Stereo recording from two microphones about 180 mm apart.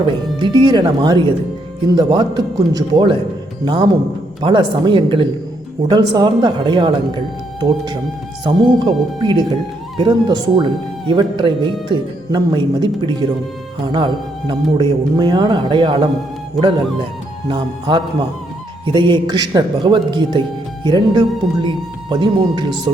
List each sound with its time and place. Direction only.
0.0 s a man's voice: 25° right (ahead or behind)
8.4 s a man's voice: 25° right (ahead or behind)
17.5 s a man's voice: 25° right (ahead or behind)